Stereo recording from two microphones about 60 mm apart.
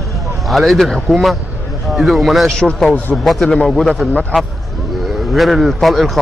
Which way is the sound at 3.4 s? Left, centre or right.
Left.